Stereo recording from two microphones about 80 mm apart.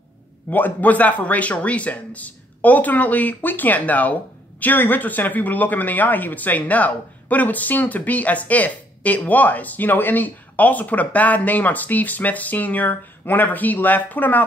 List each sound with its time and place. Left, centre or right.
0.5 s speech: left